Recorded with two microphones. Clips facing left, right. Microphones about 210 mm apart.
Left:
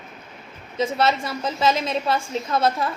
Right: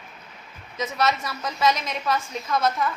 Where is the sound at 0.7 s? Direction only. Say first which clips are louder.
Left 4 dB; 30° left (ahead or behind).